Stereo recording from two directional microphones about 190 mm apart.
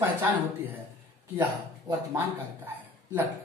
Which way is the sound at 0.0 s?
10° right (ahead or behind).